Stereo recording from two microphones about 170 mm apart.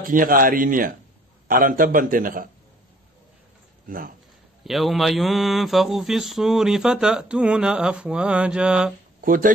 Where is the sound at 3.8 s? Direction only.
55° right (ahead or behind).